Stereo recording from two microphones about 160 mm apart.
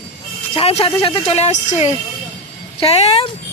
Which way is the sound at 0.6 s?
35° left (ahead or behind).